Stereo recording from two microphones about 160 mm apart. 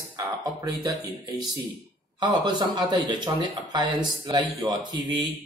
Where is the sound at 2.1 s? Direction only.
25° right (ahead or behind).